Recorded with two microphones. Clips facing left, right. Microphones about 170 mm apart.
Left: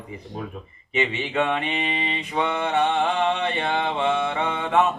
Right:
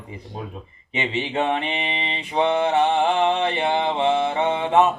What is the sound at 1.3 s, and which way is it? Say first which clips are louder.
A man's voice: right 2 dB; 25° right (ahead or behind).